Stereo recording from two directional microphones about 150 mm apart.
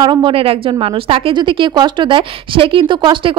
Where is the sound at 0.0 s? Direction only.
30° right (ahead or behind).